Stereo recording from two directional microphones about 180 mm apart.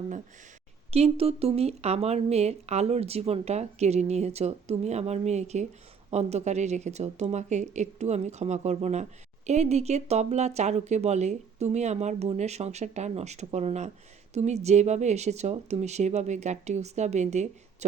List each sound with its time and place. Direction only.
0.9 s speech: 35° right (ahead or behind)